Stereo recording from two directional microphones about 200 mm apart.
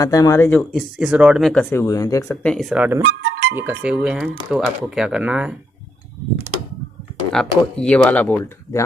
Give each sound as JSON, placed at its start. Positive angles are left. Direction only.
{"t": 0.0, "sound": "speech", "side_deg": 15}
{"t": 0.6, "sound": "speech", "side_deg": 0}
{"t": 2.4, "sound": "speech", "side_deg": 0}
{"t": 3.0, "sound": "music", "side_deg": -60}
{"t": 3.5, "sound": "speech", "side_deg": -10}
{"t": 7.3, "sound": "speech", "side_deg": 5}